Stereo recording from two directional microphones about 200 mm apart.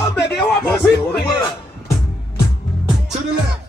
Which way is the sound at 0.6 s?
10° left (ahead or behind).